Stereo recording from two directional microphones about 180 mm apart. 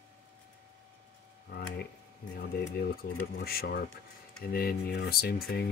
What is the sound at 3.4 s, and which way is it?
Speech, 60° left (ahead or behind).